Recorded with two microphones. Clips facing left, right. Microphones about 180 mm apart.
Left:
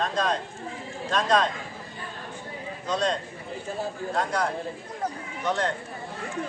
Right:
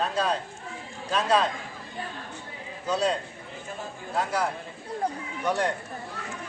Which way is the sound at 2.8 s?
5° right (ahead or behind).